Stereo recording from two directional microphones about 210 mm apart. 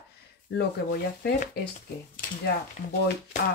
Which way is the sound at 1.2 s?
50° left (ahead or behind).